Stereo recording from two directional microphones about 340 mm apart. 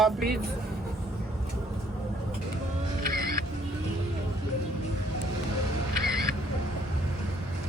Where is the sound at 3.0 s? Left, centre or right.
Right.